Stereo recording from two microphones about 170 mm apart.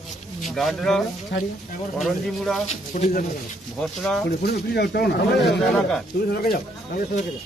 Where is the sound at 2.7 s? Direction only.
45° left (ahead or behind).